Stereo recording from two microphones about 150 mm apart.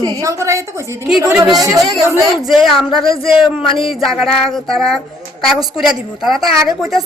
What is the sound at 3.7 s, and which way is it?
Music, 35° left (ahead or behind).